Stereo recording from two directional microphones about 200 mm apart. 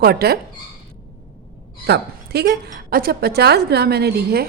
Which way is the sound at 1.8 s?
55° right (ahead or behind).